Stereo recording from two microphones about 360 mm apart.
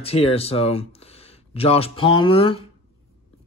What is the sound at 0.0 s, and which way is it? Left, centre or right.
Speech, centre.